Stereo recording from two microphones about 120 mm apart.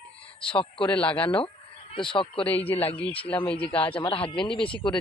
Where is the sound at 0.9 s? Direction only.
10° left (ahead or behind).